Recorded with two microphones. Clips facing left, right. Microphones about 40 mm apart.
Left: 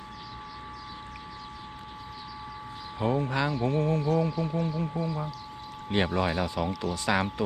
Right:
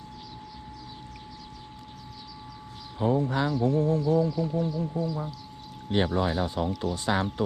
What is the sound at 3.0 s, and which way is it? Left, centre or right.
Speech, left.